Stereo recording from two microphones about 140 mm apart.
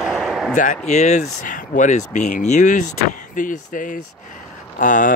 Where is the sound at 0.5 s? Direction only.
60° left (ahead or behind).